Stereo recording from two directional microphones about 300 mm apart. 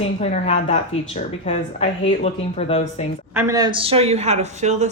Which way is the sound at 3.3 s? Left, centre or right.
Centre.